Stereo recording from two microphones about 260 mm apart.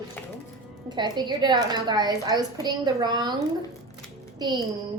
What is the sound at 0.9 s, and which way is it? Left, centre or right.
A woman's voice, centre.